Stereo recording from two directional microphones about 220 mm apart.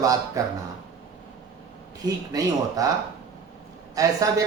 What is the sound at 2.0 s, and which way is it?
Speech, 15° right (ahead or behind).